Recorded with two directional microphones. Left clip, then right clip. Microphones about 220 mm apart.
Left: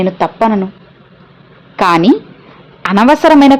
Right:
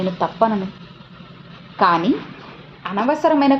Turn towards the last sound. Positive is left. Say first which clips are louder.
# left 9 dB
turn(degrees=45)  # may be behind; listen again after turning